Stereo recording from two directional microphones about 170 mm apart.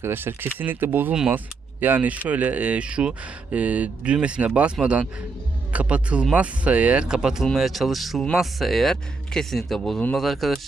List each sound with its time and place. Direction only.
0.0 s speech: 15° right (ahead or behind)